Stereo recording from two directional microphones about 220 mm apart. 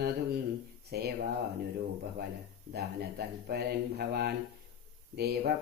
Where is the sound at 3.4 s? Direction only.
45° right (ahead or behind).